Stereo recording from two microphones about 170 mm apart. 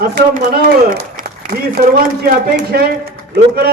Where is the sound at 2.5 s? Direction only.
70° right (ahead or behind).